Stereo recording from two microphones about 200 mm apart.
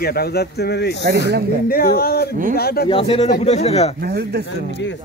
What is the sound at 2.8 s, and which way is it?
Speech, 25° left (ahead or behind).